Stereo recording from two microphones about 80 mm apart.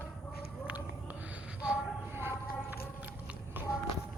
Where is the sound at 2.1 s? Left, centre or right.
Right.